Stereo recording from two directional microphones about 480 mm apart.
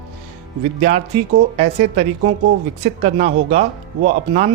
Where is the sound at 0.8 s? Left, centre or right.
Centre.